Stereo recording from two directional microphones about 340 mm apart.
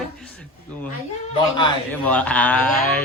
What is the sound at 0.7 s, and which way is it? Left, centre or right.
Speech, centre.